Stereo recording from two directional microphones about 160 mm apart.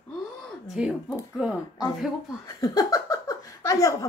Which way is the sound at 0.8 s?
5° right (ahead or behind).